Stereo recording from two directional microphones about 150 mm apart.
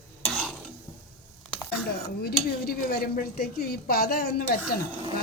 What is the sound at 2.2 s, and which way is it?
A woman's voice, 90° left.